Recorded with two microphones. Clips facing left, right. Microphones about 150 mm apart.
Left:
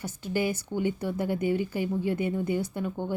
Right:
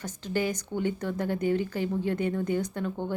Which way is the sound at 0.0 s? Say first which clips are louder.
Left 1 dB; 10° left (ahead or behind).